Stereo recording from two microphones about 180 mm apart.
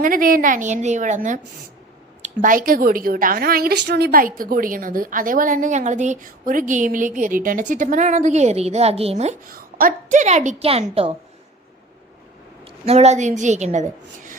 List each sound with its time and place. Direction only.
0.0 s a woman's voice: 50° right (ahead or behind); by 9.3 s 35° right (ahead or behind)
9.5 s a woman's voice: 50° right (ahead or behind); by 11.1 s 35° right (ahead or behind)
12.6 s a woman's voice: 35° right (ahead or behind)